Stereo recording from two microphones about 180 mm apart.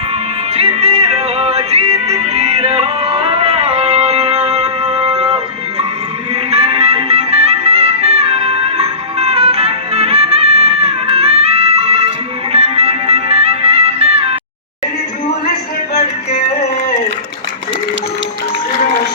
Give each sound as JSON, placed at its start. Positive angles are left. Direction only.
{"t": 0.5, "sound": "music", "side_deg": -35}
{"t": 6.5, "sound": "music", "side_deg": -35}